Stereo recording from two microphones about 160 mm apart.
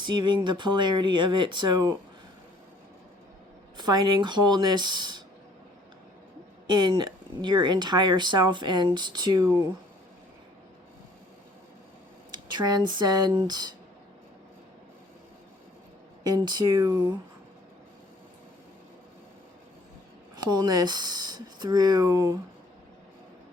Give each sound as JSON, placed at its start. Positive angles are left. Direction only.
{"t": 0.0, "sound": "speech", "side_deg": -30}
{"t": 3.8, "sound": "speech", "side_deg": -25}
{"t": 6.7, "sound": "speech", "side_deg": -25}
{"t": 12.5, "sound": "speech", "side_deg": -25}
{"t": 16.2, "sound": "speech", "side_deg": -25}
{"t": 20.3, "sound": "speech", "side_deg": -25}